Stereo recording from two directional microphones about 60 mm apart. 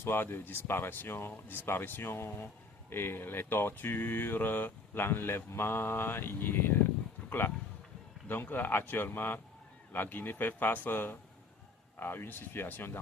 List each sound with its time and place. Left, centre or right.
0.0 s speech: left